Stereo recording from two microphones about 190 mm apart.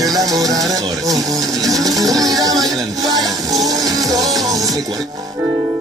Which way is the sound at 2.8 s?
20° right (ahead or behind).